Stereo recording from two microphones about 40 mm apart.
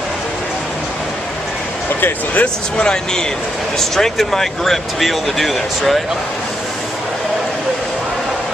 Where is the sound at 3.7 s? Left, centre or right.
Centre.